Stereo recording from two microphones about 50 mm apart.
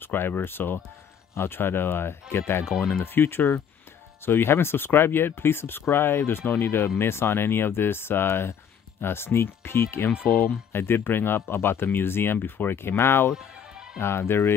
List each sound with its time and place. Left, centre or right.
0.0 s speech: left
2.6 s speech: centre
2.9 s speech: left
13.3 s music: centre
13.9 s speech: left